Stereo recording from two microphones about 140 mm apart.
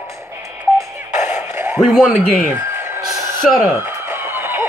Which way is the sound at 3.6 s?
15° right (ahead or behind).